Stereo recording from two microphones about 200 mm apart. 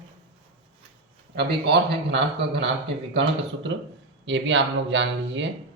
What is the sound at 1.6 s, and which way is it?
Speech, 55° right (ahead or behind).